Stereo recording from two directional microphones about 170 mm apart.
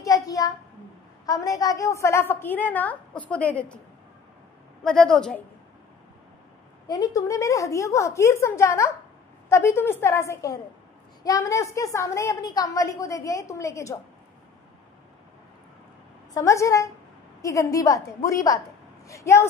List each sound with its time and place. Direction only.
0.0 s a sound: 20° left (ahead or behind)
1.2 s a woman's voice: 20° left (ahead or behind)
4.8 s a woman's voice: 5° left (ahead or behind)
6.9 s a woman's voice: 20° left (ahead or behind)
16.3 s a woman's voice: 20° left (ahead or behind)